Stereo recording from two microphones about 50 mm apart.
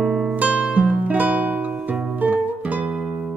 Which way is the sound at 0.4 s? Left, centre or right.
Right.